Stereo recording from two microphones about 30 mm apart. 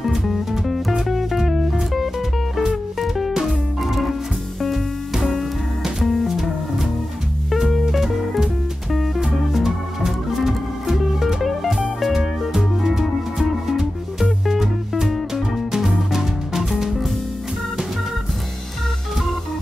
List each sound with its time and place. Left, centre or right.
0.0 s music: centre
6.2 s music: centre
7.8 s music: centre